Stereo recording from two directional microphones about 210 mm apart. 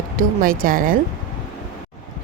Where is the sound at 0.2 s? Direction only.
40° right (ahead or behind).